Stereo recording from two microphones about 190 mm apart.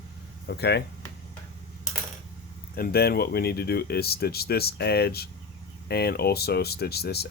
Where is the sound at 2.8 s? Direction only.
55° left (ahead or behind).